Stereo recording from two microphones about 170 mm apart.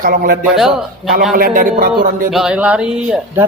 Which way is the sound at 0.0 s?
55° right (ahead or behind).